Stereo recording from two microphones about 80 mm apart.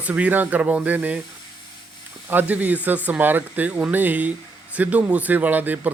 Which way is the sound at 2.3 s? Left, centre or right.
Right.